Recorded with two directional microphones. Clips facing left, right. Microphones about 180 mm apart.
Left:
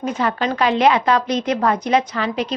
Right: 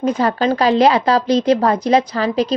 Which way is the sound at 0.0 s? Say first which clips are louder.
Right 4 dB; 35° right (ahead or behind).